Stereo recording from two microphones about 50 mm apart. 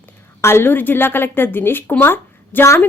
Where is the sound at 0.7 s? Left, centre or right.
Left.